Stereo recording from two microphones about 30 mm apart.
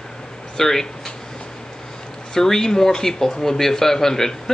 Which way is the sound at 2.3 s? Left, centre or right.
Centre.